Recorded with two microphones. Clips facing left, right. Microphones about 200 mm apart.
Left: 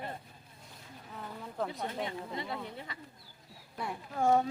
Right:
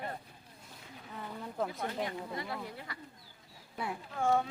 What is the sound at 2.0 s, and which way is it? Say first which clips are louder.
Speech: even; 25° left (ahead or behind).